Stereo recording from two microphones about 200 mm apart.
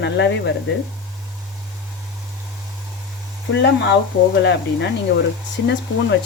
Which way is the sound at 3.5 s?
60° left (ahead or behind).